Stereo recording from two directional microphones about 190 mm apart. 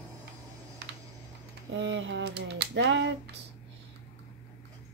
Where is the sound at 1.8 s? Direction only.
70° right (ahead or behind).